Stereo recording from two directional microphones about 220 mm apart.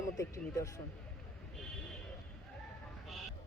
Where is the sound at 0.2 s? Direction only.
15° left (ahead or behind).